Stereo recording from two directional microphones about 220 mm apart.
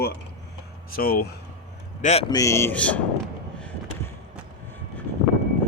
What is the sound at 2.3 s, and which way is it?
Speech, 15° left (ahead or behind).